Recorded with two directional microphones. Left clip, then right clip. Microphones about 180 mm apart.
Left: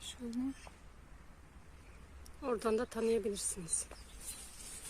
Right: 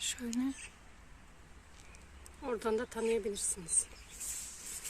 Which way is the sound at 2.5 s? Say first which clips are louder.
Even; 35° left (ahead or behind).